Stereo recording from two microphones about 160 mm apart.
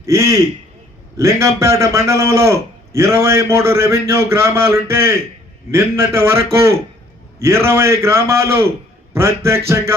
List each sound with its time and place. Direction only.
0.0 s a man's voice: 20° right (ahead or behind)